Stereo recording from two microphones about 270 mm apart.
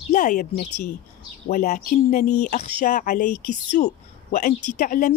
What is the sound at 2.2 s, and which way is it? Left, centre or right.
Speech, left.